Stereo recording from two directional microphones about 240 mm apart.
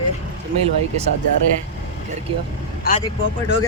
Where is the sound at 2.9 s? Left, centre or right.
Left.